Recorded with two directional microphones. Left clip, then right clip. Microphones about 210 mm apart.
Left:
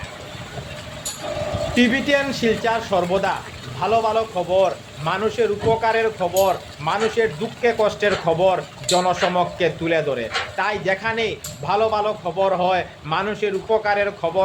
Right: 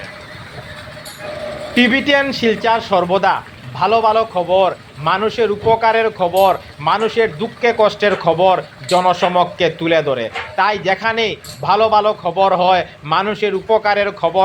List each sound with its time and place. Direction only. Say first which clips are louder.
1.7 s a man's voice: right 6 dB; 15° right (ahead or behind)